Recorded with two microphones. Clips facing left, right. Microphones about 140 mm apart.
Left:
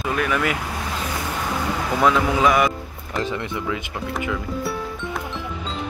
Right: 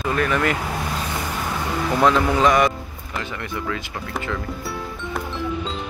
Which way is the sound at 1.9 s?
5° left (ahead or behind).